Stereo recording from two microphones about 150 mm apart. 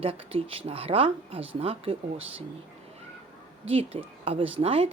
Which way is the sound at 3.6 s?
40° right (ahead or behind).